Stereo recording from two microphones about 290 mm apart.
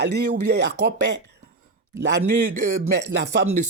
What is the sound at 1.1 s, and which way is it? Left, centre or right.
Speech, right.